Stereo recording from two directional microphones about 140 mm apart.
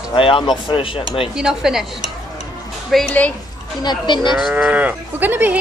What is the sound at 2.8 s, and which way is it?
Speech, 5° left (ahead or behind).